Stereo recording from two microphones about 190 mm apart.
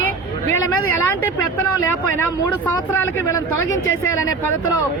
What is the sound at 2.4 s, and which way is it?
Speech, 15° left (ahead or behind).